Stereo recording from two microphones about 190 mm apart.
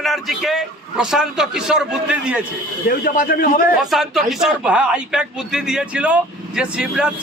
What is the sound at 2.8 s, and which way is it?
Speech, 50° left (ahead or behind).